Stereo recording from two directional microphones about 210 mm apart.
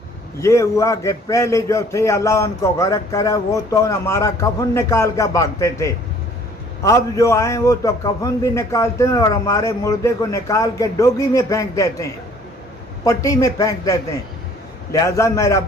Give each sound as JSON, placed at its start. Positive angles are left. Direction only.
{"t": 0.3, "sound": "a man's voice", "side_deg": 15}
{"t": 13.1, "sound": "a man's voice", "side_deg": 15}